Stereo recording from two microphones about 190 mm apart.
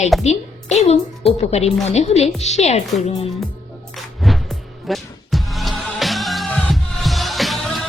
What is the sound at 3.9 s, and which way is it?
Music, centre (ahead or behind).